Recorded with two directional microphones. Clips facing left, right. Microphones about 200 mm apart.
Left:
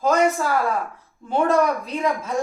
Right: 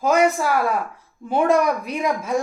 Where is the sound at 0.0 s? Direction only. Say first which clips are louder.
Right 1 dB; 10° right (ahead or behind).